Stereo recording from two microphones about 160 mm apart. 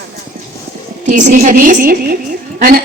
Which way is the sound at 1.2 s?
55° right (ahead or behind).